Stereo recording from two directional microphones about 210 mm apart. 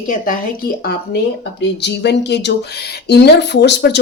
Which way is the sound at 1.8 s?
55° left (ahead or behind).